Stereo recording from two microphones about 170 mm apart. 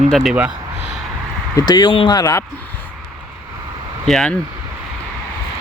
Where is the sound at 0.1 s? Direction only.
Centre (ahead or behind).